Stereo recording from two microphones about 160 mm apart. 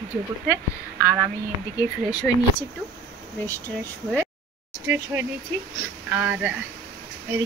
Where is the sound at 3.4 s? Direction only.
15° left (ahead or behind).